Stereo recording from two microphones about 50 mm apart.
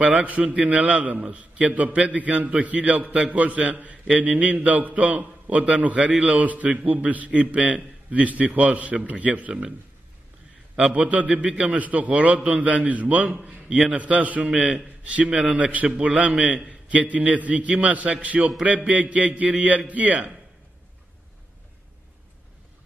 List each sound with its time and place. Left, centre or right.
0.0 s a man's voice: right
11.0 s a man's voice: right